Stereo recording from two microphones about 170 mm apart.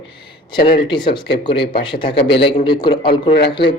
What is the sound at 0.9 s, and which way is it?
Speech, 25° left (ahead or behind).